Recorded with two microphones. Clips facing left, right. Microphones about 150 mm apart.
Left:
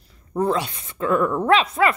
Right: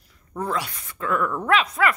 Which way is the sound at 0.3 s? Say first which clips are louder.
Left 6 dB; 25° left (ahead or behind).